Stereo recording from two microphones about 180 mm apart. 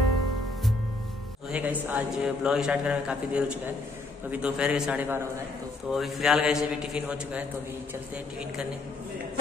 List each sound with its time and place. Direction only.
1.5 s a man's voice: 10° right (ahead or behind)